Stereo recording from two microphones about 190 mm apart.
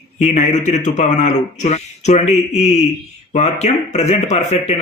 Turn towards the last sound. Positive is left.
turn(degrees=35)  # may be behind; listen again after turning